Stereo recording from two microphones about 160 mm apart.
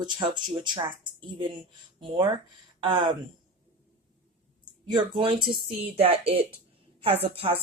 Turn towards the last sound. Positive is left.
turn(degrees=-35)  # may be behind; listen again after turning